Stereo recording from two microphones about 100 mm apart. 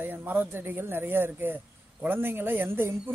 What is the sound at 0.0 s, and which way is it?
Speech, 20° right (ahead or behind).